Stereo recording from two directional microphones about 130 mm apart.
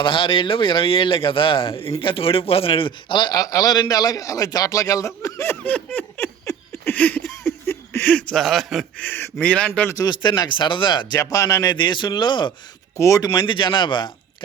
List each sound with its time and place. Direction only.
0.0 s a man's voice: 40° left (ahead or behind); by 8.9 s centre (ahead or behind)
9.0 s speech: 15° left (ahead or behind)
9.9 s speech: 30° left (ahead or behind)
11.2 s speech: 25° left (ahead or behind)
13.0 s speech: 25° left (ahead or behind)
13.4 s speech: 40° left (ahead or behind)